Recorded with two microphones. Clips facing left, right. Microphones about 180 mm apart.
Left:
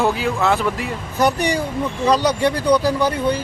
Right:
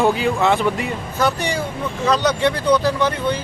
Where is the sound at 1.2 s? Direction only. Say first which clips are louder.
Left 3 dB; 15° left (ahead or behind).